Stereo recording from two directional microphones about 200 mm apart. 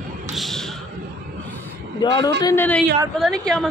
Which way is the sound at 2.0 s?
20° left (ahead or behind).